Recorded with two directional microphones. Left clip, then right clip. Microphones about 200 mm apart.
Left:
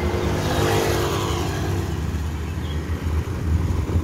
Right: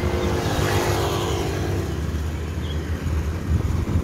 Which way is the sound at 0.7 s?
40° left (ahead or behind).